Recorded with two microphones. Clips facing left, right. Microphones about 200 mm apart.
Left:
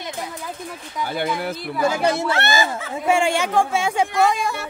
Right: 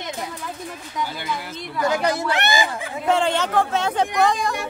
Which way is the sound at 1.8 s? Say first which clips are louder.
Even; 10° left (ahead or behind).